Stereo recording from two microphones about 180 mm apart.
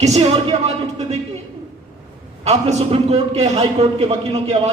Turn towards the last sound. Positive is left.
turn(degrees=-35)  # may be behind; listen again after turning